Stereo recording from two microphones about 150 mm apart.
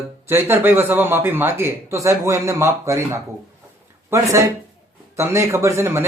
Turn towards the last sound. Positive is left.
turn(degrees=-15)  # may be behind; listen again after turning